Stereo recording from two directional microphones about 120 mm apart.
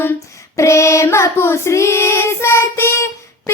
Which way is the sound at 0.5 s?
25° left (ahead or behind).